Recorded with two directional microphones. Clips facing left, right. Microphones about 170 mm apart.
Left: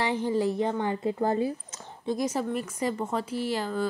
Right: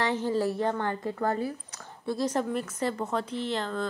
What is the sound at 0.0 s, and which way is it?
A woman's voice, 15° left (ahead or behind).